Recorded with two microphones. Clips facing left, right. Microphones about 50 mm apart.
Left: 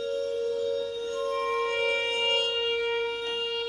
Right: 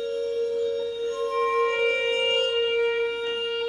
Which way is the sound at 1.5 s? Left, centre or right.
Centre.